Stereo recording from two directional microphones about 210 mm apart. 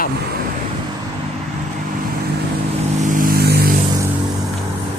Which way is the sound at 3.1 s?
45° right (ahead or behind).